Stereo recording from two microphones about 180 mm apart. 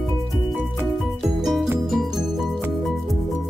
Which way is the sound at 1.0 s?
Centre (ahead or behind).